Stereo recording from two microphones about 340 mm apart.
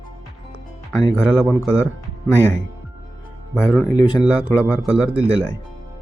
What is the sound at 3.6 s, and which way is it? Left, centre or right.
Speech, centre.